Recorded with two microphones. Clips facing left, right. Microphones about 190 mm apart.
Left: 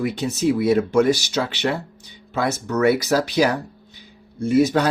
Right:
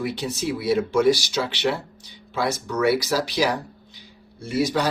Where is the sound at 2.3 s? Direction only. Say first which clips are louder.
Left 3 dB; 50° left (ahead or behind).